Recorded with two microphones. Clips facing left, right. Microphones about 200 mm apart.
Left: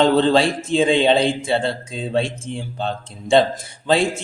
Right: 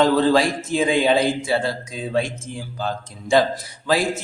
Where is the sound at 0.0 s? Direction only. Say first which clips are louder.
Left 1 dB; 25° left (ahead or behind).